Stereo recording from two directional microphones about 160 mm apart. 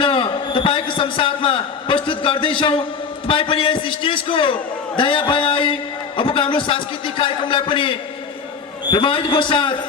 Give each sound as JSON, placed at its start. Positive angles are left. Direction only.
{"t": 0.0, "sound": "a man's voice", "side_deg": 30}